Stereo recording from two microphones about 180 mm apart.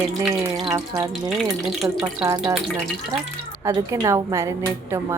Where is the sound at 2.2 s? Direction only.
20° right (ahead or behind).